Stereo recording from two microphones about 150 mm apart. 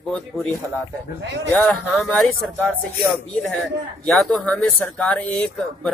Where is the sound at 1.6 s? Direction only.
5° left (ahead or behind).